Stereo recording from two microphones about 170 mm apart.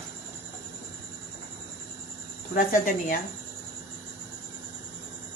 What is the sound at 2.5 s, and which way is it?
Speech, 50° left (ahead or behind).